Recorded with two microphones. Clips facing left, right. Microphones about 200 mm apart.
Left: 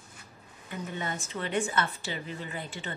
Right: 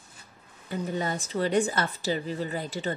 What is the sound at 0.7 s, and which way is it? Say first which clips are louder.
Speech: right 6 dB; 35° right (ahead or behind).